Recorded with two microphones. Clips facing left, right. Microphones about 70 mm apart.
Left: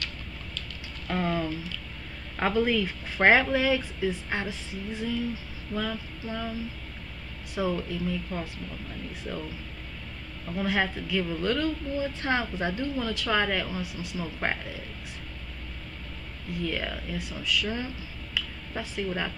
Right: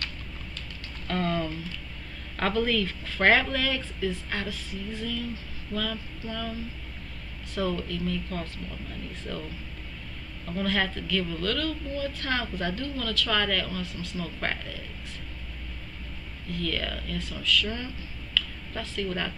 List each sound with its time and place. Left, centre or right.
1.0 s a sound: centre
2.3 s speech: centre
7.5 s speech: centre
10.5 s a woman's voice: centre
16.5 s speech: centre
18.3 s a sound: centre